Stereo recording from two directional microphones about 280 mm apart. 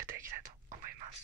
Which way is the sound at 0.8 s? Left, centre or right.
Right.